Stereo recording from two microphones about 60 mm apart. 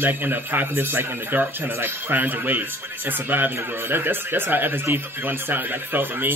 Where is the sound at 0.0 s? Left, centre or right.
Right.